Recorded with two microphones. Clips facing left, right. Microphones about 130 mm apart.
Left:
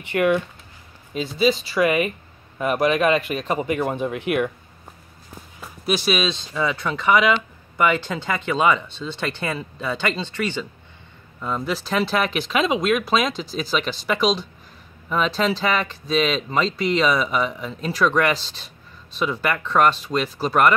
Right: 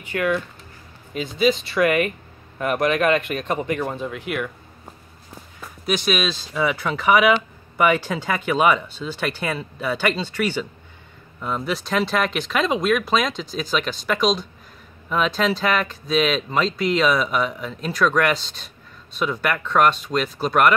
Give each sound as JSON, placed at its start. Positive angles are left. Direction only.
{"t": 0.1, "sound": "speech", "side_deg": 25}
{"t": 1.4, "sound": "speech", "side_deg": 0}
{"t": 5.6, "sound": "speech", "side_deg": 5}